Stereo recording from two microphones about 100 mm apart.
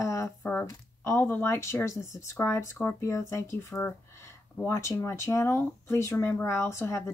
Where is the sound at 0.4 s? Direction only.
15° left (ahead or behind).